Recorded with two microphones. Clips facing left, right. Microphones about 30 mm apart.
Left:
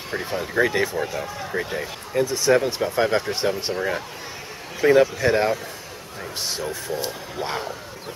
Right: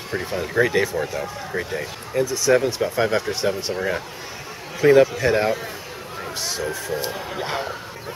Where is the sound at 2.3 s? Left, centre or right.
Centre.